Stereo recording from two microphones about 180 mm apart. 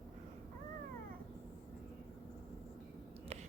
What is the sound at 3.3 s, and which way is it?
Whispering, 35° right (ahead or behind).